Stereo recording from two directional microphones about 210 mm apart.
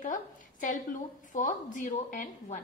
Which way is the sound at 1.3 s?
40° left (ahead or behind).